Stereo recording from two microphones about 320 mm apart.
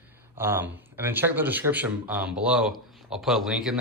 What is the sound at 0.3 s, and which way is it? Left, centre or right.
Speech, centre.